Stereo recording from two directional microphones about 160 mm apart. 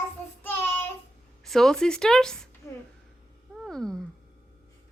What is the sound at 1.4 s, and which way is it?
Speech, centre (ahead or behind).